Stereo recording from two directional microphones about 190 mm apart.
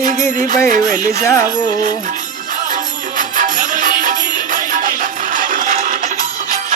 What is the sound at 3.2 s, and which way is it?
Music, 40° right (ahead or behind).